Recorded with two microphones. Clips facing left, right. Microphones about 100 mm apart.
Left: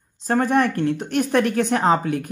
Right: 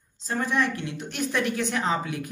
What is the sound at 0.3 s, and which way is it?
Speech, 55° left (ahead or behind).